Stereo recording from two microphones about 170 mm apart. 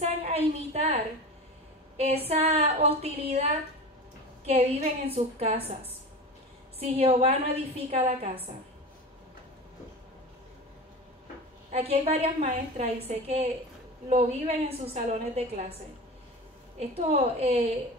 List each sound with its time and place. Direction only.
0.0 s a sound: 40° right (ahead or behind)
2.0 s a woman's voice: 35° right (ahead or behind)
7.0 s a woman's voice: 35° right (ahead or behind)
11.7 s a woman's voice: 35° right (ahead or behind)
16.9 s a woman's voice: 35° right (ahead or behind)